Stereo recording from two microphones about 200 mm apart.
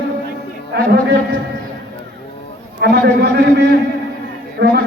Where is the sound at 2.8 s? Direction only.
55° right (ahead or behind).